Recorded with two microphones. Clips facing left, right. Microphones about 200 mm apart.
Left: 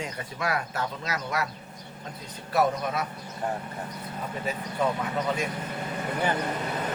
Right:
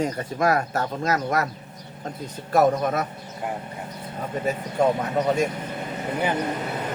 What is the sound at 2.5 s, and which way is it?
Speech, 45° right (ahead or behind).